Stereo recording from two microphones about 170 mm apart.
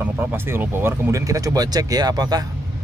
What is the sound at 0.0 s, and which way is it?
Speech, 10° right (ahead or behind).